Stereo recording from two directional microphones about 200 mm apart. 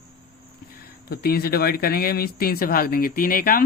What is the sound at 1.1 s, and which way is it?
Speech, 50° left (ahead or behind).